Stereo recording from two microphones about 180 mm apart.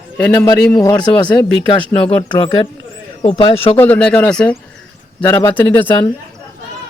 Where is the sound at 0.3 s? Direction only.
20° left (ahead or behind).